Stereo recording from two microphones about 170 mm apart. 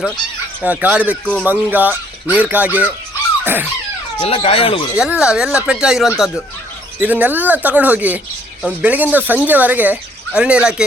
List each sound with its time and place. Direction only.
0.6 s speech: 10° right (ahead or behind)
1.2 s speech: 5° left (ahead or behind)
1.5 s speech: 10° right (ahead or behind)
3.4 s dog: 10° right (ahead or behind)
4.2 s speech: 35° left (ahead or behind)
4.9 s speech: 5° right (ahead or behind)